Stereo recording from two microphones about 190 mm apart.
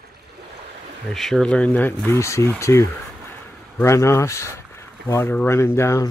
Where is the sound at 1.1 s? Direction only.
Centre (ahead or behind).